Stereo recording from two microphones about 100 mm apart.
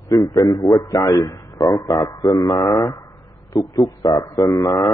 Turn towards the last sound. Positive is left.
turn(degrees=35)  # may be behind; listen again after turning